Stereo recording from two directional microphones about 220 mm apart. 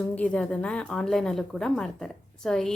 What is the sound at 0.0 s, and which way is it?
A woman's voice, 5° left (ahead or behind).